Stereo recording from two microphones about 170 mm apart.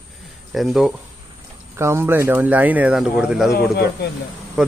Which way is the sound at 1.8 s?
15° right (ahead or behind).